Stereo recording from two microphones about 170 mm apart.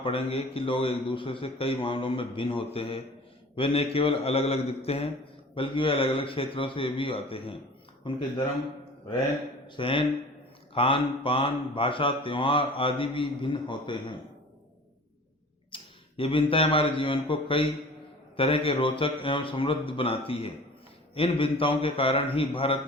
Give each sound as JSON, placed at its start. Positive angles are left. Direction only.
{"t": 0.0, "sound": "mantra", "side_deg": 30}
{"t": 8.1, "sound": "speech", "side_deg": 30}
{"t": 9.6, "sound": "mantra", "side_deg": 30}
{"t": 15.7, "sound": "speech", "side_deg": 30}
{"t": 18.3, "sound": "mantra", "side_deg": 30}